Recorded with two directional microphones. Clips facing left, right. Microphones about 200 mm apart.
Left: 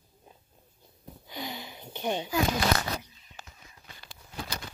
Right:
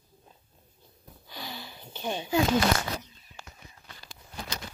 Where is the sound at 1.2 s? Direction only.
20° left (ahead or behind).